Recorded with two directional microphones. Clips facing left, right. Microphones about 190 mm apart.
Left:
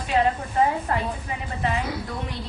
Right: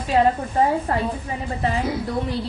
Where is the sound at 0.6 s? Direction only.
35° right (ahead or behind).